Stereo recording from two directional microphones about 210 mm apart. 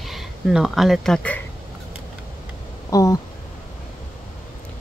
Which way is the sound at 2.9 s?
15° left (ahead or behind).